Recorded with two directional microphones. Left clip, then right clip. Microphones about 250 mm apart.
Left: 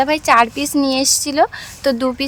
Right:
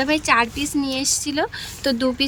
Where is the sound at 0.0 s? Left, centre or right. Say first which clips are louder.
Left 5 dB; centre.